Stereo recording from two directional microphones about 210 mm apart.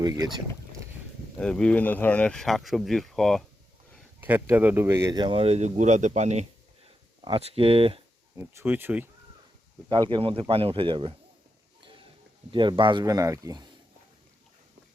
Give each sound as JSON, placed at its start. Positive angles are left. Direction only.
{"t": 0.0, "sound": "speech", "side_deg": -20}
{"t": 1.4, "sound": "speech", "side_deg": 5}
{"t": 4.2, "sound": "speech", "side_deg": -10}
{"t": 8.4, "sound": "speech", "side_deg": -10}
{"t": 9.9, "sound": "speech", "side_deg": -25}
{"t": 12.5, "sound": "speech", "side_deg": -25}